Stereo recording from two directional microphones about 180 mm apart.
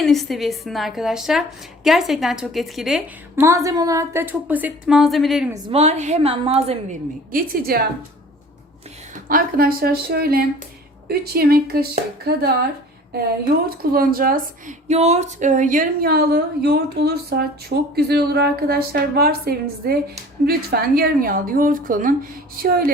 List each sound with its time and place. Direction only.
0.0 s a woman's voice: centre (ahead or behind)
3.4 s a woman's voice: 15° right (ahead or behind); by 5.5 s centre (ahead or behind)
5.7 s a woman's voice: 35° right (ahead or behind)
7.3 s a woman's voice: 55° right (ahead or behind)
9.1 s a woman's voice: 50° right (ahead or behind)